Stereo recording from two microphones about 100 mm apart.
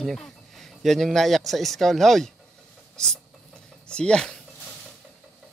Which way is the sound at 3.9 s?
10° left (ahead or behind).